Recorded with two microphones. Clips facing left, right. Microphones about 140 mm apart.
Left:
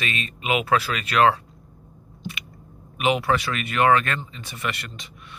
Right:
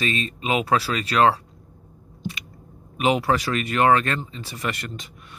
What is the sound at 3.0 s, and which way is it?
Speech, 35° right (ahead or behind).